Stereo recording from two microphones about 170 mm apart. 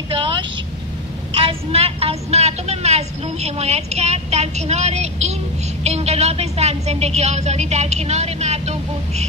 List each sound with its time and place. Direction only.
0.1 s vehicle: 30° right (ahead or behind)
1.3 s a woman's voice: 35° right (ahead or behind)